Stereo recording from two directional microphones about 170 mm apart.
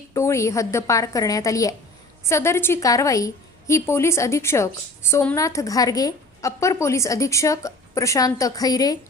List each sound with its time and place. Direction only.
0.1 s a woman's voice: 15° left (ahead or behind)